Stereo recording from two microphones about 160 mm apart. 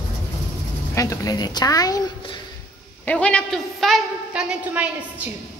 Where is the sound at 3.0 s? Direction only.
10° left (ahead or behind); by 5.3 s 10° right (ahead or behind).